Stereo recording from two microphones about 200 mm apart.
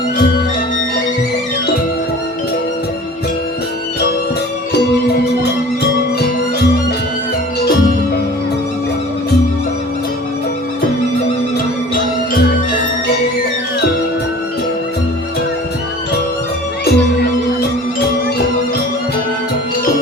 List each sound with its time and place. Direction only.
16.8 s music: 55° left (ahead or behind)